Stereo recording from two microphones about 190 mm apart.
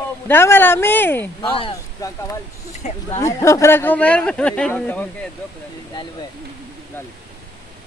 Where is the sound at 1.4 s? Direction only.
30° left (ahead or behind).